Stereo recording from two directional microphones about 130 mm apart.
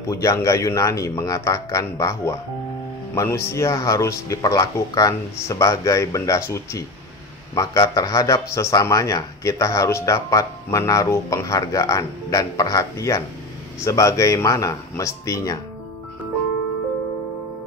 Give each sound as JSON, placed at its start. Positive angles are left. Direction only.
{"t": 0.1, "sound": "a man's voice", "side_deg": 25}